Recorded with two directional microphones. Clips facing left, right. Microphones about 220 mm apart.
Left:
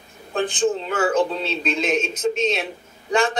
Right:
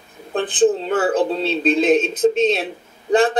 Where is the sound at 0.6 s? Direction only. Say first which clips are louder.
Right 7 dB; 30° right (ahead or behind).